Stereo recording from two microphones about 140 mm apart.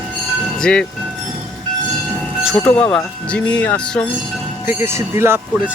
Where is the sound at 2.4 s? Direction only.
Centre (ahead or behind).